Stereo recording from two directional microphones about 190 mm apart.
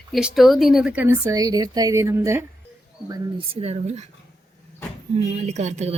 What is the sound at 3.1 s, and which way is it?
Speech, 30° right (ahead or behind).